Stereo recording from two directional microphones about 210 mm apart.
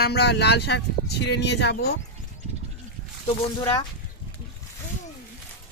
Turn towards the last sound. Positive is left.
turn(degrees=15)  # may be behind; listen again after turning